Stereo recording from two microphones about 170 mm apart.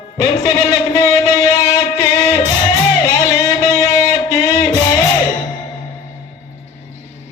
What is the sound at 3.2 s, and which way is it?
Music, 20° left (ahead or behind).